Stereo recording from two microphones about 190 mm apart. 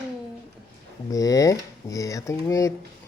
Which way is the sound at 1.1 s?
15° left (ahead or behind).